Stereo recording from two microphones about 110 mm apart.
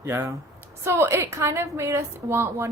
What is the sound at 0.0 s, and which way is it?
A woman's voice, 25° right (ahead or behind).